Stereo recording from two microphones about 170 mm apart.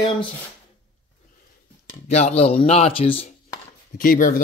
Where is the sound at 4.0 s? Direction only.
55° left (ahead or behind).